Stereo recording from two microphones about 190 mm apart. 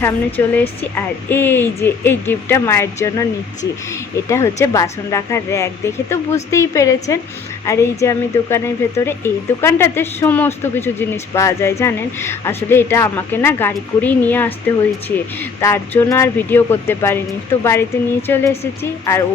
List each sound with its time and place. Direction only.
0.0 s speech: 10° left (ahead or behind)
4.3 s speech: 15° left (ahead or behind)